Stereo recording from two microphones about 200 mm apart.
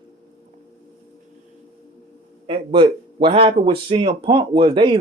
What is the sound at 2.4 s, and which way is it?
Speech, 25° right (ahead or behind).